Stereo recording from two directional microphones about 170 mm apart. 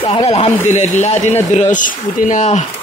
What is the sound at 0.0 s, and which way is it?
Speech, 35° left (ahead or behind).